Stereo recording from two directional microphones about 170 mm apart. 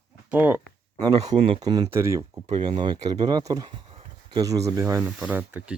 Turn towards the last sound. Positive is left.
turn(degrees=-10)  # may be behind; listen again after turning